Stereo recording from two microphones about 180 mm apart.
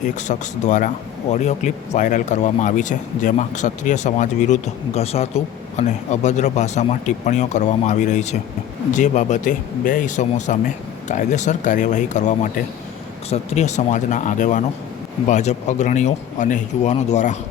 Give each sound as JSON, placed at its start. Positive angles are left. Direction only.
{"t": 0.3, "sound": "speech", "side_deg": 45}